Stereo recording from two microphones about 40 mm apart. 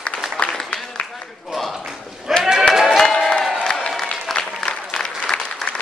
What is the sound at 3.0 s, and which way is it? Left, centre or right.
Crowd, centre.